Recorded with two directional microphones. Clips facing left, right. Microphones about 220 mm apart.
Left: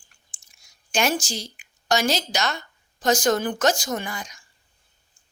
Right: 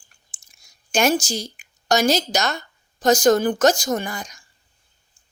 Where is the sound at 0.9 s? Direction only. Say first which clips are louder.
Right 4 dB; 40° right (ahead or behind).